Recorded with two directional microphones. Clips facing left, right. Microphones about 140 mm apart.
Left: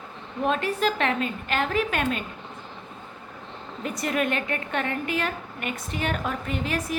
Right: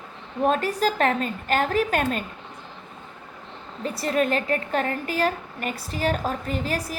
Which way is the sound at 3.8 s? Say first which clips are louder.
Right 3 dB; 30° right (ahead or behind).